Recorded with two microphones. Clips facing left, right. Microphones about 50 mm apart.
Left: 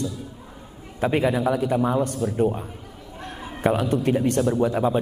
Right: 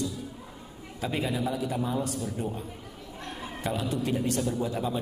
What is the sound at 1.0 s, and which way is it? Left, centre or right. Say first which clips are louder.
A man's voice: left 9 dB; left.